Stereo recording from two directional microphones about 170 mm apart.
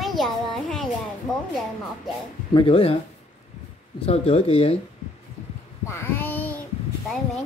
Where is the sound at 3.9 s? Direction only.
35° left (ahead or behind).